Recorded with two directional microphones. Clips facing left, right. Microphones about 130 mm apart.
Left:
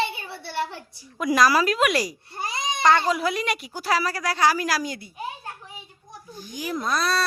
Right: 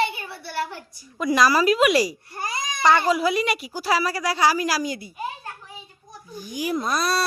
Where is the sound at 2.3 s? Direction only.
25° left (ahead or behind).